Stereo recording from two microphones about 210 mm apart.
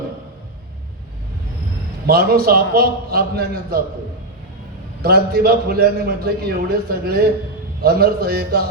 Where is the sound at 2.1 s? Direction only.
45° right (ahead or behind).